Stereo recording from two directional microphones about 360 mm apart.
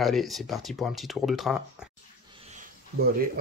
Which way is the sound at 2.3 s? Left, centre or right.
Centre.